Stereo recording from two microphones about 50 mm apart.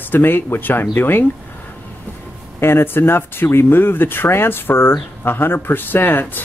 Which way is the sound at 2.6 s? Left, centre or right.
Left.